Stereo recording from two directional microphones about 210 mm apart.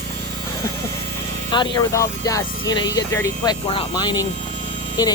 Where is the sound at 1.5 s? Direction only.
20° left (ahead or behind).